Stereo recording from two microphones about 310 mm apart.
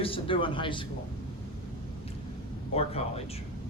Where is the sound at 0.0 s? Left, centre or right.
Centre.